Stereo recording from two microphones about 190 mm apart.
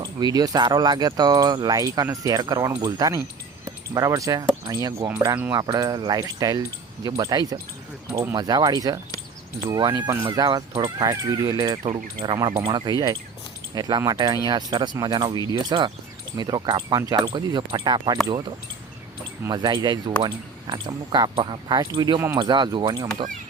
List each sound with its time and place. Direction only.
0.0 s speech: 20° right (ahead or behind)
11.8 s speech: 40° right (ahead or behind)
12.2 s speech: 25° right (ahead or behind)